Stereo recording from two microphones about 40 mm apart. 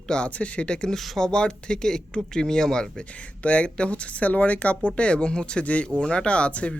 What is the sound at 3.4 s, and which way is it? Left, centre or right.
Speech, left.